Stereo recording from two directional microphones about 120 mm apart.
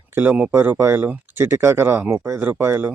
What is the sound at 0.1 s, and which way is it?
Speech, 15° right (ahead or behind).